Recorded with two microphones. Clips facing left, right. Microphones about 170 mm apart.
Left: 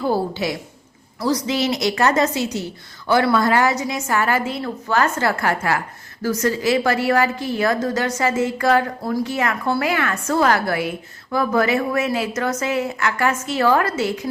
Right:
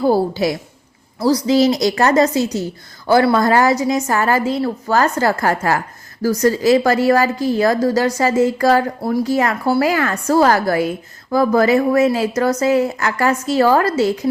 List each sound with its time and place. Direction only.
0.0 s a woman's voice: 40° right (ahead or behind)